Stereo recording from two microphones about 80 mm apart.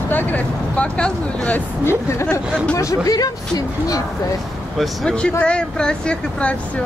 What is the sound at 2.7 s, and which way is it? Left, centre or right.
Speech, left.